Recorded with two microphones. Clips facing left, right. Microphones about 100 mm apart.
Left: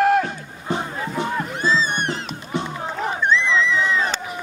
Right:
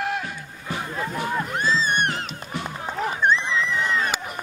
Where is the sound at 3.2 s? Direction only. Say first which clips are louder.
Left 1 dB; 45° right (ahead or behind).